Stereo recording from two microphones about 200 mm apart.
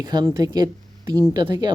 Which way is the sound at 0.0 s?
20° right (ahead or behind).